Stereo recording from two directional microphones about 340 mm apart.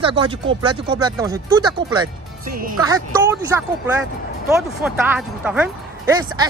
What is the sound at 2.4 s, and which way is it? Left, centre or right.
Speech, right.